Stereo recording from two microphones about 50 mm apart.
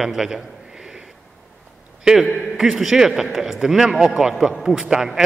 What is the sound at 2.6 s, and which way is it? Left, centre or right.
A man's voice, centre.